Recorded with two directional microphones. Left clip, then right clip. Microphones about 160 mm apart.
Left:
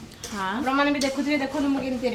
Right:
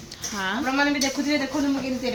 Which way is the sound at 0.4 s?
5° right (ahead or behind).